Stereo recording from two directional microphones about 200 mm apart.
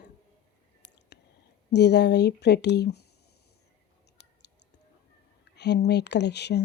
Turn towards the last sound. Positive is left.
turn(degrees=55)  # may be behind; listen again after turning